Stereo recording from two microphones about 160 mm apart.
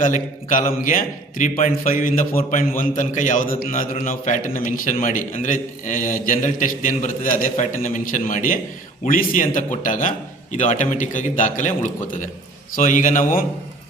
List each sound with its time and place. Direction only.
0.0 s a man's voice: 55° left (ahead or behind)